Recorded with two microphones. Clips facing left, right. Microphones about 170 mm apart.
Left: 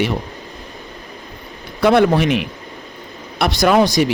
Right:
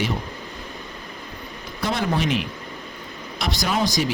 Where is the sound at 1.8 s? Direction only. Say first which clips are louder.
Left 11 dB; 65° left (ahead or behind).